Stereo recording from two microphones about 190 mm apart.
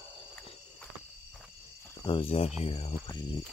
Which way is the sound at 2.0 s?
30° left (ahead or behind).